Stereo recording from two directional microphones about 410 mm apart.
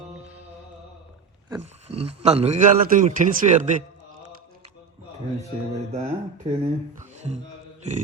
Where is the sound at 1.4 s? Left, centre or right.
Centre.